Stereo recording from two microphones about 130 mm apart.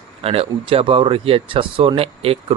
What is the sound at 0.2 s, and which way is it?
Speech, 50° right (ahead or behind).